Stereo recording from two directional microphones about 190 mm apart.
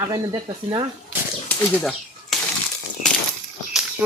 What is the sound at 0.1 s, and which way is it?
Speech, 25° right (ahead or behind).